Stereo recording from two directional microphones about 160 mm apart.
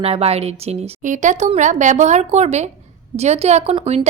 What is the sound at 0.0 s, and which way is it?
A woman's voice, 40° right (ahead or behind).